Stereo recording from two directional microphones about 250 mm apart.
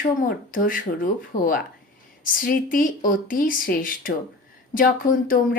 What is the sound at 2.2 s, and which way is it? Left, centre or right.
Speech, left.